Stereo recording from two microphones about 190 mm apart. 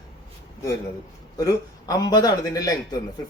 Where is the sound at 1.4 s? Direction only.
20° left (ahead or behind).